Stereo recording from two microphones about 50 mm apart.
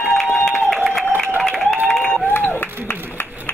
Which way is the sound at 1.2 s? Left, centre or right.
Centre.